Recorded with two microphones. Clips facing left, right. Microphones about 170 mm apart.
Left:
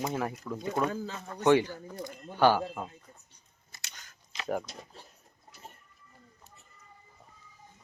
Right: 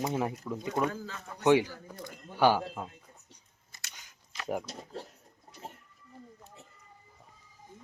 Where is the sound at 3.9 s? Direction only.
10° right (ahead or behind).